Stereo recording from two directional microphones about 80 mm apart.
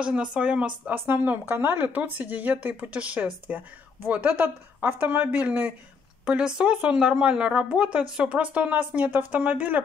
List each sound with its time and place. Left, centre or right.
0.0 s a woman's voice: centre
0.9 s a woman's voice: right